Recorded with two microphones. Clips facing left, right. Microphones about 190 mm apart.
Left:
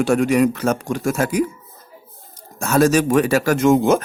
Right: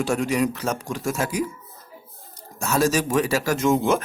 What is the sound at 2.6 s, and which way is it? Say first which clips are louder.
Speech: left 6 dB; 55° left (ahead or behind).